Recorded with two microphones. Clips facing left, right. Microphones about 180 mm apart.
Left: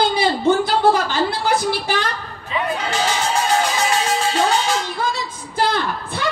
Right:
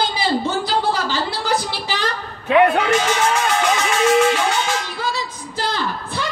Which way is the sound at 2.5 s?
65° right (ahead or behind).